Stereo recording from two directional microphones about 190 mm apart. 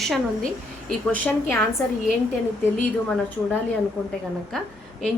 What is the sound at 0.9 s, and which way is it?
Speech, 5° left (ahead or behind).